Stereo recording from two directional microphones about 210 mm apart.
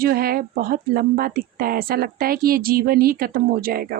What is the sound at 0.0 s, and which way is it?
Speech, 45° right (ahead or behind).